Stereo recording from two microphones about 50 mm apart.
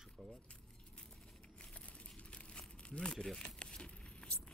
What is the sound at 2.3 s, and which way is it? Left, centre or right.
Crumpling, left.